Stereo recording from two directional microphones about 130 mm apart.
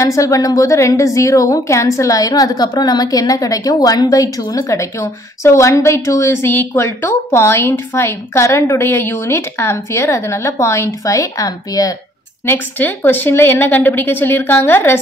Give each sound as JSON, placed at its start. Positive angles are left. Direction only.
{"t": 0.0, "sound": "a woman's voice", "side_deg": 25}
{"t": 12.4, "sound": "a woman's voice", "side_deg": 15}